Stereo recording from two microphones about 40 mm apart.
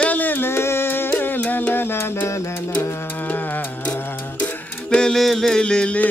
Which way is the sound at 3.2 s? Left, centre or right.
Left.